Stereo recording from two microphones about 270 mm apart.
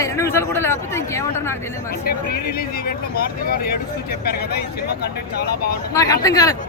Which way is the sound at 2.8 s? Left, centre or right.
Left.